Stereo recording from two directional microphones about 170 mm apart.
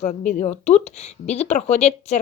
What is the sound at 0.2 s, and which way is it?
Speech, 45° left (ahead or behind).